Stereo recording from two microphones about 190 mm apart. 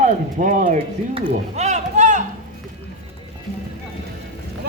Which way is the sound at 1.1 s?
35° right (ahead or behind).